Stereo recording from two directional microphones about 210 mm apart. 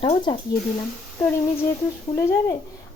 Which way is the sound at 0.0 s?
25° left (ahead or behind).